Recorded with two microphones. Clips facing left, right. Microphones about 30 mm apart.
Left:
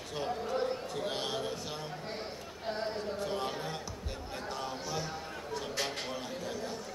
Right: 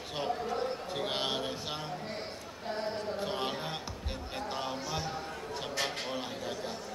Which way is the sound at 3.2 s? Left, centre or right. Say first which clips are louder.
Right 1 dB; right.